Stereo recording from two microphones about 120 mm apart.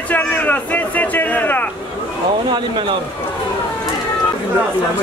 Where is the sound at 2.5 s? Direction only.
45° right (ahead or behind).